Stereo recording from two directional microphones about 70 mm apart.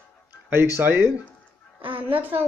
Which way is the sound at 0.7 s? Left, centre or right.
Right.